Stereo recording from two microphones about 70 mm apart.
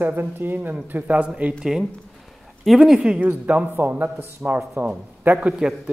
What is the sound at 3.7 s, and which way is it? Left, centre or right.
A man's voice, right.